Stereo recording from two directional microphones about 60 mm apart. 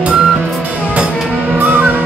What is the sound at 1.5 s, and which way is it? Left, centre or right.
Music, right.